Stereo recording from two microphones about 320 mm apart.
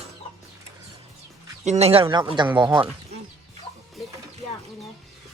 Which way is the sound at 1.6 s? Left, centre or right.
Centre.